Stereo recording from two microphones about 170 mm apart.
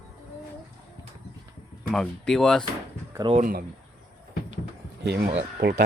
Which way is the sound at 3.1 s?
30° right (ahead or behind).